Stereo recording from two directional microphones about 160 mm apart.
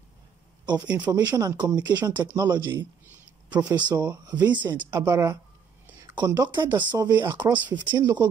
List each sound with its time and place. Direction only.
1.1 s speech: 25° right (ahead or behind)